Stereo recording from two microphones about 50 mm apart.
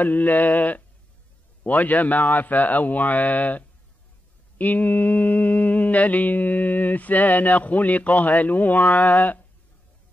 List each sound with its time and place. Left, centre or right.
0.0 s mantra: left